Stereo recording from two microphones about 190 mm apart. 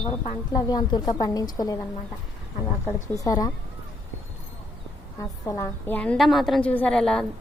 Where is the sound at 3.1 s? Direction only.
20° left (ahead or behind).